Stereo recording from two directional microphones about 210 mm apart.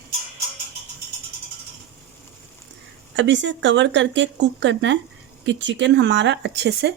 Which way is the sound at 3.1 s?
60° right (ahead or behind).